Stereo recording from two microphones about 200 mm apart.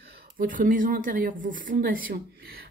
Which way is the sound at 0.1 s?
45° right (ahead or behind).